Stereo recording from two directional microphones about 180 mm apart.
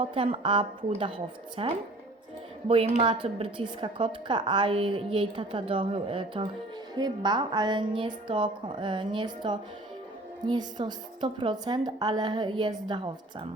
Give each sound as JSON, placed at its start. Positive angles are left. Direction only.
{"t": 0.0, "sound": "a woman's voice", "side_deg": -30}